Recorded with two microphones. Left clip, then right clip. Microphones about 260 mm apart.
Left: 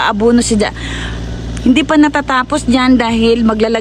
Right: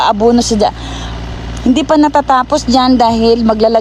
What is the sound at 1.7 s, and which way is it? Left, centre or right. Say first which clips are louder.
Speech: right 2 dB; centre.